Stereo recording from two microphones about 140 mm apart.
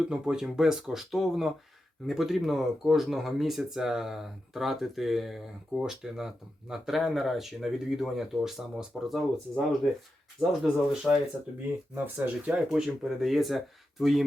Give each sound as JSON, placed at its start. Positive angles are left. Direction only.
{"t": 0.0, "sound": "speech", "side_deg": -5}
{"t": 11.9, "sound": "speech", "side_deg": -15}